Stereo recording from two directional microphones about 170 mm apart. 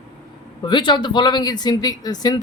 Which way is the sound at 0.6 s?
25° left (ahead or behind).